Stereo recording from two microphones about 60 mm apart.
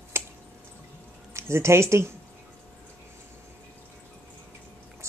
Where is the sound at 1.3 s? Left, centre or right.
Right.